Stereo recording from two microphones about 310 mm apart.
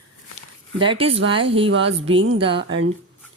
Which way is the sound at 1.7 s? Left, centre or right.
Right.